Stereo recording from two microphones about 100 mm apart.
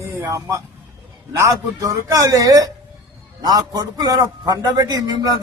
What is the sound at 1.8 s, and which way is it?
A man's voice, 35° right (ahead or behind).